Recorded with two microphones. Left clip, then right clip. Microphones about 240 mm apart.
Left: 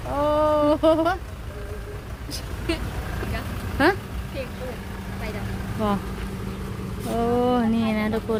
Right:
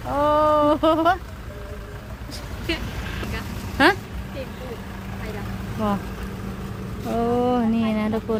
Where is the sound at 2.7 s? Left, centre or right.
Left.